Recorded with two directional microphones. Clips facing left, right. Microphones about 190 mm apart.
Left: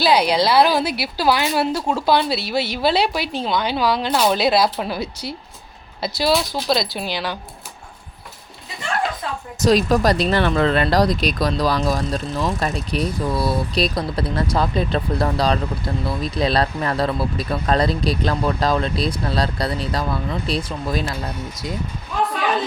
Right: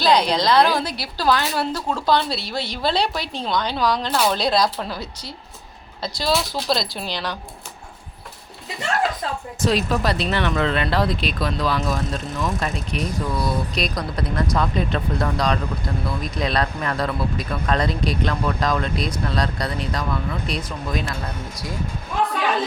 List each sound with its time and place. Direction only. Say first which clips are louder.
0.0 s a woman's voice: left 2 dB; 10° left (ahead or behind)
9.6 s speech: left 5 dB; 40° left (ahead or behind)